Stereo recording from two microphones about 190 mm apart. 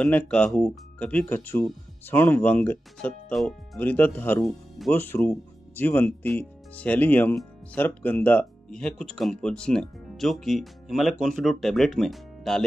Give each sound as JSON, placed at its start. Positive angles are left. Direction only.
{"t": 0.0, "sound": "speech", "side_deg": 5}